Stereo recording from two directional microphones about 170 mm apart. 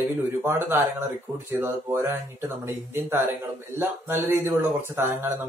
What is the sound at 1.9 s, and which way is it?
Speech, 15° right (ahead or behind).